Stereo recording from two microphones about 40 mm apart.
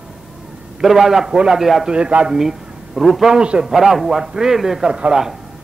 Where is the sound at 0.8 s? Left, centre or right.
Centre.